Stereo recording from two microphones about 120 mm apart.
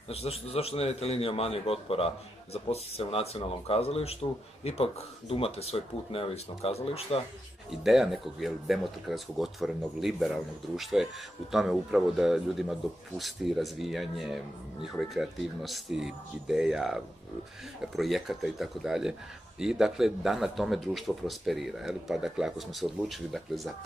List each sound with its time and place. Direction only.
0.1 s a man's voice: 55° left (ahead or behind)
7.8 s speech: centre (ahead or behind)